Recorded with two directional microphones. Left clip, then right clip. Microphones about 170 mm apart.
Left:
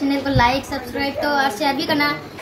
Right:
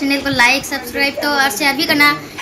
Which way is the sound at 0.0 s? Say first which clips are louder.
Right 4 dB; 15° left (ahead or behind).